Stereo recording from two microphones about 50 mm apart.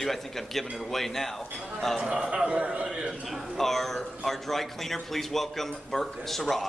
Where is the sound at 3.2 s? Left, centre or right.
Centre.